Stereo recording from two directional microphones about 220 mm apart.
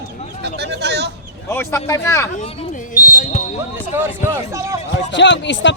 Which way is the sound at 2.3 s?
30° left (ahead or behind).